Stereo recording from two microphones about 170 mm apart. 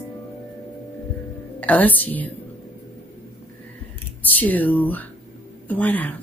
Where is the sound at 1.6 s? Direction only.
10° left (ahead or behind).